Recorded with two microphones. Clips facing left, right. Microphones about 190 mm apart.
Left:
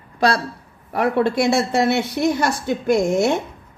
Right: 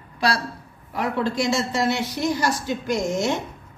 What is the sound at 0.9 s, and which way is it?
A woman's voice, 60° left (ahead or behind).